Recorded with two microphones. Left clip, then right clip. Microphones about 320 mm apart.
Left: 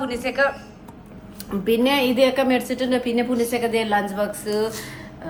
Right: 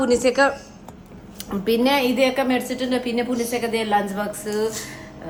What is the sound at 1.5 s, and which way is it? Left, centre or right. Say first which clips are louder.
Speech: even; centre.